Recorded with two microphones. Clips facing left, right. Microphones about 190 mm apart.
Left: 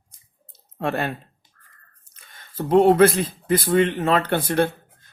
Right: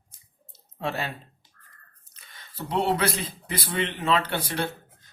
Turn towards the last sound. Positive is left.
turn(degrees=50)  # may be behind; listen again after turning